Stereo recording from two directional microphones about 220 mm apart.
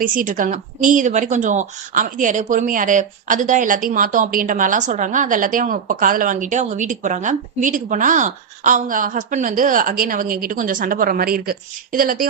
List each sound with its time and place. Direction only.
0.0 s a woman's voice: 40° right (ahead or behind)